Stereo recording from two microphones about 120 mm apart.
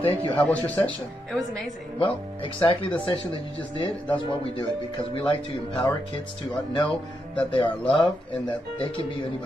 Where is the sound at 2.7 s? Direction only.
45° left (ahead or behind).